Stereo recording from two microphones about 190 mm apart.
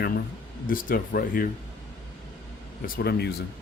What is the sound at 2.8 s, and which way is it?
Speech, 55° left (ahead or behind).